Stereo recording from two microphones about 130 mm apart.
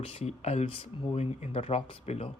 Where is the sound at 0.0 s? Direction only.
50° left (ahead or behind).